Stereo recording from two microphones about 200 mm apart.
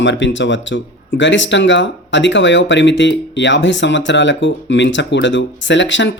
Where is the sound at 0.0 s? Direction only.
65° left (ahead or behind).